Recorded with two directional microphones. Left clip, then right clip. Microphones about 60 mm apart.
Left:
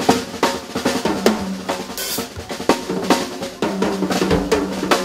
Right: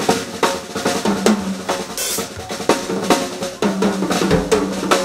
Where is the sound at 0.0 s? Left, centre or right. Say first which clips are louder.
Even; right.